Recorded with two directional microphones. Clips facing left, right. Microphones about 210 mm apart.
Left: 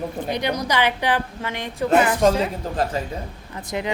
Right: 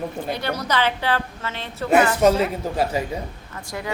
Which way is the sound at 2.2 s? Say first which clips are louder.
Right 1 dB; 5° right (ahead or behind).